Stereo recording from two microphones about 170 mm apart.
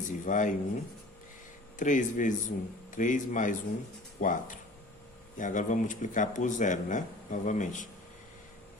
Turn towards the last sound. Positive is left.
turn(degrees=45)  # may be behind; listen again after turning